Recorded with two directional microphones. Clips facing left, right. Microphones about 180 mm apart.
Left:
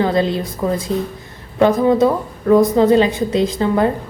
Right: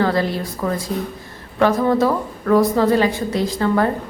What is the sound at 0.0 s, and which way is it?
A woman's voice, 20° left (ahead or behind).